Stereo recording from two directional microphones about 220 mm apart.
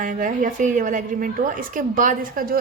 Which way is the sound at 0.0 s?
35° right (ahead or behind).